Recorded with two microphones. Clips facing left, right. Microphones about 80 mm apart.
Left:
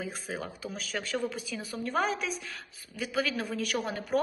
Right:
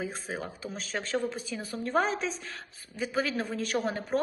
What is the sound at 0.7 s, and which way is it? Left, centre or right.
A man's voice, right.